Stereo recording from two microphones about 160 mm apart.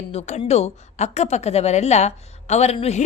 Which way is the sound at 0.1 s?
45° left (ahead or behind).